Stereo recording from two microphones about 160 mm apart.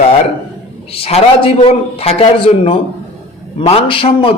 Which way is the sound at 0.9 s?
35° left (ahead or behind).